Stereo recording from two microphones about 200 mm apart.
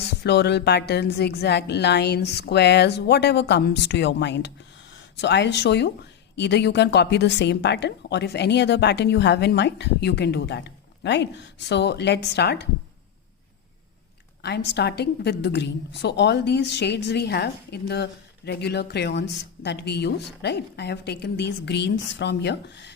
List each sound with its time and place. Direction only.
0.2 s a woman's voice: 55° left (ahead or behind)
14.4 s a woman's voice: 60° left (ahead or behind)